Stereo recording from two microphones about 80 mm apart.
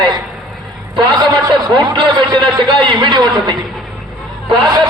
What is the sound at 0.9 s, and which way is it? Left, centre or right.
A man's voice, right.